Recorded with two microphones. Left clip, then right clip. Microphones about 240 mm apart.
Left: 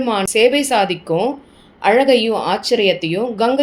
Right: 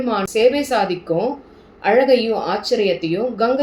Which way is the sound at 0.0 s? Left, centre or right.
Left.